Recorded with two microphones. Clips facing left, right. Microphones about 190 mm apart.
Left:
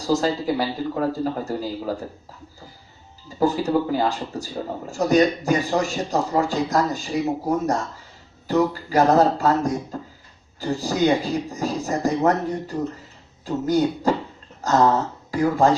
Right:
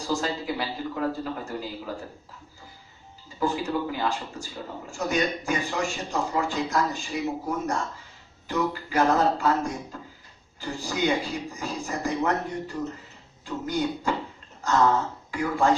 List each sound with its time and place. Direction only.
0.1 s a man's voice: 40° left (ahead or behind)
3.4 s a man's voice: 40° left (ahead or behind)